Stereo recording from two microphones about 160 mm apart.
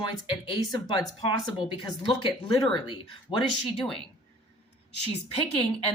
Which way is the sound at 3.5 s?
Centre (ahead or behind).